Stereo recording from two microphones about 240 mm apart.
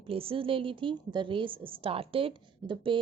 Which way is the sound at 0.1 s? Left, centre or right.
Right.